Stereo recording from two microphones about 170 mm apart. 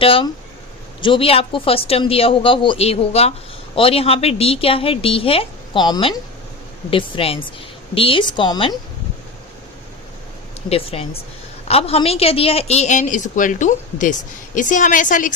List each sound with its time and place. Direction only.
0.0 s a woman's voice: 35° left (ahead or behind)
10.7 s a woman's voice: 35° left (ahead or behind); by 15.3 s 50° left (ahead or behind)